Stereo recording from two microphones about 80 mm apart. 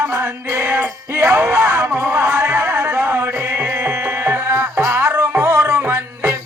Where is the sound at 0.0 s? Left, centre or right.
Right.